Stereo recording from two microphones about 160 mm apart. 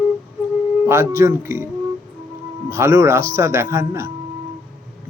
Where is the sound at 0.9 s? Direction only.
15° right (ahead or behind).